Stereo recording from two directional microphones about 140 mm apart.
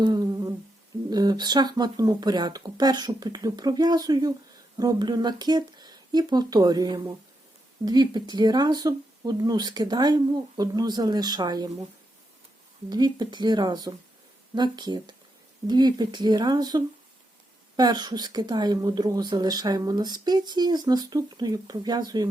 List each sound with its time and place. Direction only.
0.0 s humming: 30° right (ahead or behind)
1.1 s speech: 30° right (ahead or behind)
12.9 s speech: 30° right (ahead or behind)